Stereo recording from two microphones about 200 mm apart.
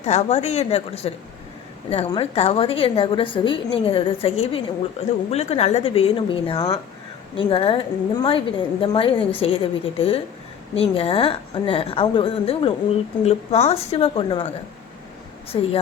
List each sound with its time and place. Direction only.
0.0 s a woman's voice: 35° left (ahead or behind)
15.5 s a woman's voice: 25° left (ahead or behind)